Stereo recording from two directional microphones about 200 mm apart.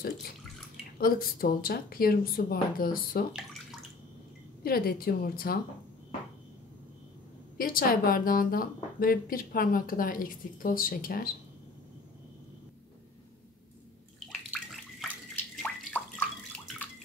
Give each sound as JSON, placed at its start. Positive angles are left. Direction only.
{"t": 0.9, "sound": "a woman's voice", "side_deg": 45}
{"t": 4.6, "sound": "a woman's voice", "side_deg": 50}
{"t": 7.5, "sound": "a woman's voice", "side_deg": 45}
{"t": 14.2, "sound": "bathtub", "side_deg": 0}